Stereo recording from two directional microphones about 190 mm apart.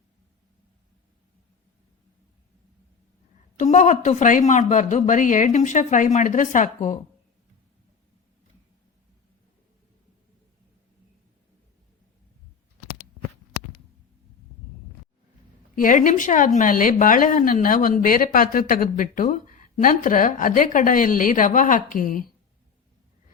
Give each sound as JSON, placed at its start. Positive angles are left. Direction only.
{"t": 3.6, "sound": "speech", "side_deg": 40}
{"t": 15.7, "sound": "speech", "side_deg": 45}